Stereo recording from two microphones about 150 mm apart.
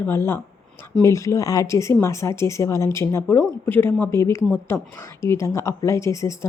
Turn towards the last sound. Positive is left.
turn(degrees=20)  # may be behind; listen again after turning